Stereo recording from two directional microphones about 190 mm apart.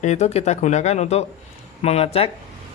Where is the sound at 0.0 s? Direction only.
35° left (ahead or behind).